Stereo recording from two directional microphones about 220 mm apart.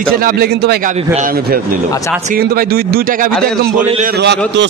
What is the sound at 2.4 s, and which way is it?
A man's voice, 45° right (ahead or behind).